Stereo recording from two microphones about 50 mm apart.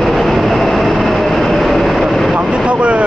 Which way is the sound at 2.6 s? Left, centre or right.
Right.